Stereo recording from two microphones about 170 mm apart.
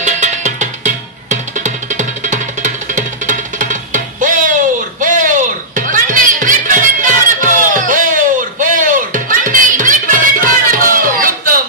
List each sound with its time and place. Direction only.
0.0 s music: 45° right (ahead or behind)